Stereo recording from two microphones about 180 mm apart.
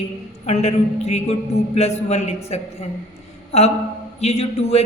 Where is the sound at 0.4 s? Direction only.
35° left (ahead or behind).